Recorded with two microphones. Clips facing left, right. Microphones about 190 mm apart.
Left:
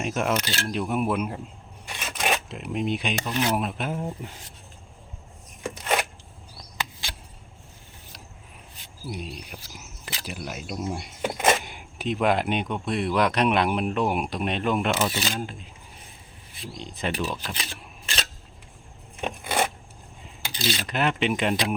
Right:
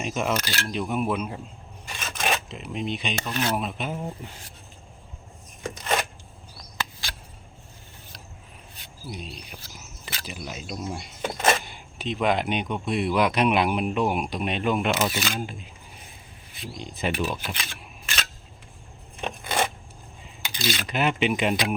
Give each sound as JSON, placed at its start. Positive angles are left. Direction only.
{"t": 0.0, "sound": "speech", "side_deg": 5}
{"t": 0.3, "sound": "speech", "side_deg": 25}
{"t": 0.7, "sound": "speech", "side_deg": 5}
{"t": 5.6, "sound": "a sound", "side_deg": 10}
{"t": 9.3, "sound": "speech", "side_deg": 5}
{"t": 15.1, "sound": "speech", "side_deg": 30}
{"t": 16.7, "sound": "speech", "side_deg": -5}
{"t": 17.5, "sound": "speech", "side_deg": 35}
{"t": 19.2, "sound": "a sound", "side_deg": 10}
{"t": 20.4, "sound": "cutlery", "side_deg": 30}
{"t": 20.8, "sound": "speech", "side_deg": -5}